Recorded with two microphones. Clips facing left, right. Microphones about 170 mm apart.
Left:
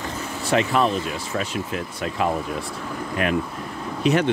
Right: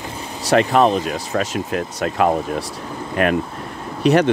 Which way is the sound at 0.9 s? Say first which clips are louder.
Right 5 dB; 40° right (ahead or behind).